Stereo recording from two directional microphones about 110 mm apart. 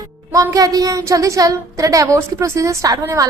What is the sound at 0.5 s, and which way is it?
A woman's voice, 35° right (ahead or behind).